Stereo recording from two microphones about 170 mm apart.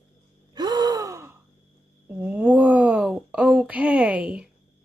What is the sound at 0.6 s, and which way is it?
Gasp, 25° right (ahead or behind).